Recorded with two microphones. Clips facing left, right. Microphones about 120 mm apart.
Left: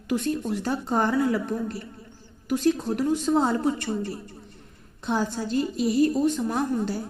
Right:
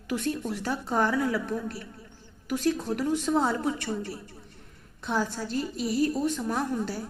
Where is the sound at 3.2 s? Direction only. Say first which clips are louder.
Left 3 dB; 15° left (ahead or behind).